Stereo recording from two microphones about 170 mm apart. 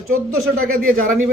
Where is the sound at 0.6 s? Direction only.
55° right (ahead or behind).